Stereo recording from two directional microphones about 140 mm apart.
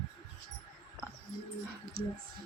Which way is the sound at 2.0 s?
90° right.